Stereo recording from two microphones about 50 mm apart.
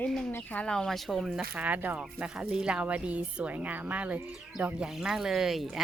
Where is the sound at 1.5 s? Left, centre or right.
Right.